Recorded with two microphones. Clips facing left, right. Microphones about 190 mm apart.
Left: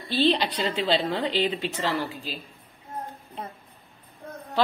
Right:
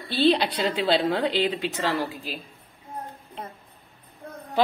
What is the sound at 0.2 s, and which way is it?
A woman's voice, 10° right (ahead or behind).